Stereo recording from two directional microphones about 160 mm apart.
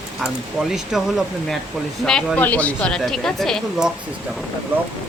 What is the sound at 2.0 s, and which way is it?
Speech, 5° left (ahead or behind).